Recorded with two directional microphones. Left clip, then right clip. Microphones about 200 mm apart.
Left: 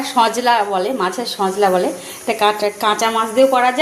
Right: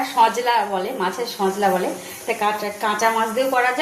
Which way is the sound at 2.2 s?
55° left (ahead or behind).